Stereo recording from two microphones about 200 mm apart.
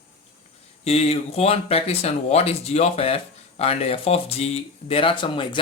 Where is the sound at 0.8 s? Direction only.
30° left (ahead or behind).